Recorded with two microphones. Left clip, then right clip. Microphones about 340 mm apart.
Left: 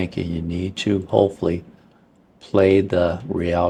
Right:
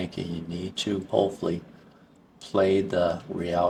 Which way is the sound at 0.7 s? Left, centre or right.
Left.